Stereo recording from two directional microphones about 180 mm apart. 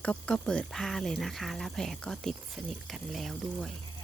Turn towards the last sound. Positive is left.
turn(degrees=0)  # may be behind; listen again after turning